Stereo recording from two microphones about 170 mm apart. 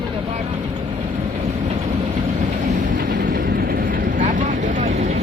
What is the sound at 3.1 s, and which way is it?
Vehicle, 50° right (ahead or behind).